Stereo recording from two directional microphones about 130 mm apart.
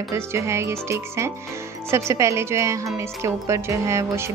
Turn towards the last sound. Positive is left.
turn(degrees=-25)  # may be behind; listen again after turning